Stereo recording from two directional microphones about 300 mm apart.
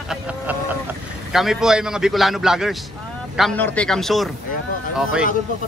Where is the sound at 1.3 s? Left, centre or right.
Centre.